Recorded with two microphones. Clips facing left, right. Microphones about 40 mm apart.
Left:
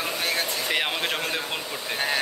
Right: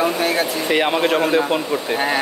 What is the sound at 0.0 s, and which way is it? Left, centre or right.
Speech, centre.